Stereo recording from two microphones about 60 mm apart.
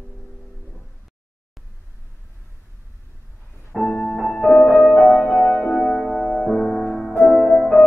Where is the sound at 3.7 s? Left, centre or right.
Centre.